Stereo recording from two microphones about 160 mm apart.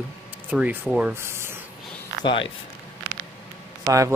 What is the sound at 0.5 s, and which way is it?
Speech, 10° right (ahead or behind).